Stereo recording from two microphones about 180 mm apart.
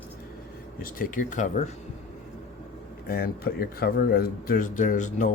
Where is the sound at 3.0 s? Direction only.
55° left (ahead or behind).